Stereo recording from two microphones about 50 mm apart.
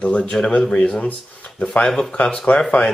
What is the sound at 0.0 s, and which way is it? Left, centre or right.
Speech, centre.